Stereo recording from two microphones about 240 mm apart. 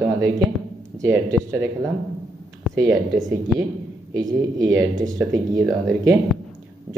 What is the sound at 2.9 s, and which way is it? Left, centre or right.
Speech, centre.